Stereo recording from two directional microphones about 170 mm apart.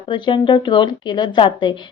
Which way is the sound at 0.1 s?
30° left (ahead or behind).